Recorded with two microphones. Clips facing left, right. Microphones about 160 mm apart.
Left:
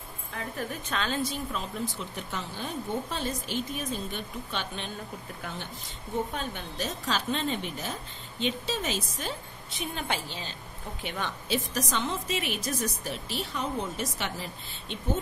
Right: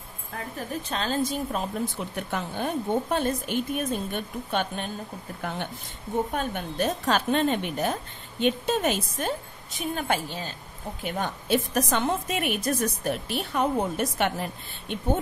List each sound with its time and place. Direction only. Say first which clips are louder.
0.6 s a woman's voice: right 2 dB; 35° right (ahead or behind); by 15.0 s 55° right (ahead or behind)